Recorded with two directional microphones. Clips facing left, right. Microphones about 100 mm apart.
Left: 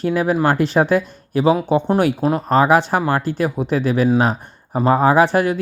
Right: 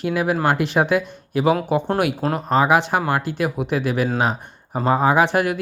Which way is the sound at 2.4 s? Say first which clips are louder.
Left 2 dB; 40° left (ahead or behind).